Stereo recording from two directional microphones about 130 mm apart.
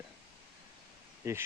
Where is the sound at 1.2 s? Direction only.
20° right (ahead or behind).